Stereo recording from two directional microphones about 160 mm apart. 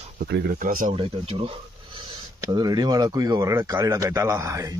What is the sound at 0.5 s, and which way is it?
Speech, 55° right (ahead or behind).